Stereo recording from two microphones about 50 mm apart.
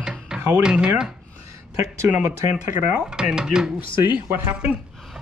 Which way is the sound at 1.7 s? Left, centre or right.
Right.